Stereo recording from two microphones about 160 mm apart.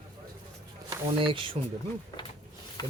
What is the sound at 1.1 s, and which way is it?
Speech, 35° right (ahead or behind).